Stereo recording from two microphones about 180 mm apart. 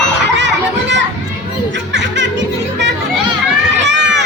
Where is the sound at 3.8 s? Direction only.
75° right (ahead or behind).